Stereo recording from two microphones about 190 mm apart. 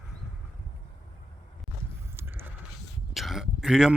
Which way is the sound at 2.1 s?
10° right (ahead or behind).